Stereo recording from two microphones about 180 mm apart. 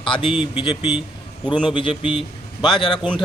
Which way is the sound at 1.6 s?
30° left (ahead or behind).